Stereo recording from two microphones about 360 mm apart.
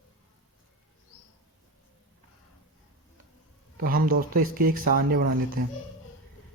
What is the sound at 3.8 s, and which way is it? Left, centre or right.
Speech, right.